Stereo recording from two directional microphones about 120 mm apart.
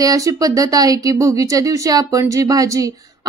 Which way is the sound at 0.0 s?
30° right (ahead or behind).